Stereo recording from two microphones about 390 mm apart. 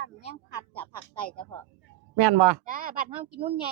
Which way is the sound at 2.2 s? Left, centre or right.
Right.